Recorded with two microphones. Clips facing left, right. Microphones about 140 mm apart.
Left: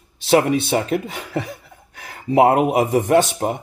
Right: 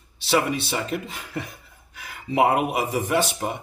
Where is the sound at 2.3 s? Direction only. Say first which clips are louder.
Left 6 dB; 40° left (ahead or behind).